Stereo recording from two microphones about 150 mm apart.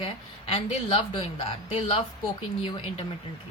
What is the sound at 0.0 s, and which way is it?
Speech, 40° left (ahead or behind).